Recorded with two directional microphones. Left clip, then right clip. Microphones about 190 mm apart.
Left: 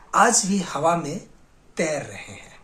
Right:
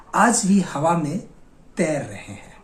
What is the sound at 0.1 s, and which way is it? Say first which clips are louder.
Speech: even; 10° left (ahead or behind).